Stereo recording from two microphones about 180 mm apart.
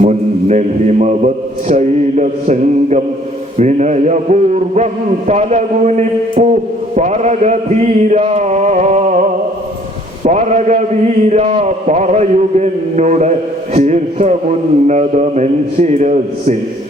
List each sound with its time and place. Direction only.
0.0 s a man's voice: 40° right (ahead or behind)
10.2 s a man's voice: 40° right (ahead or behind)